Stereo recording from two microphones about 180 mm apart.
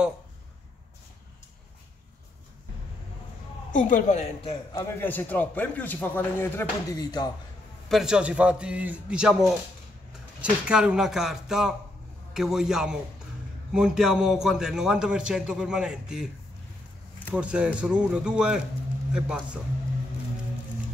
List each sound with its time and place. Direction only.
3.7 s a woman's voice: 45° left (ahead or behind)
4.4 s a man's voice: 30° left (ahead or behind)
4.8 s a man's voice: 10° left (ahead or behind)
7.9 s a man's voice: 5° right (ahead or behind)
10.7 s a man's voice: 5° right (ahead or behind)
17.3 s a man's voice: 5° right (ahead or behind)